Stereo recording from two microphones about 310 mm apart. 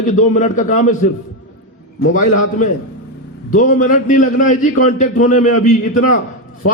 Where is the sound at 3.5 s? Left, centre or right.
Left.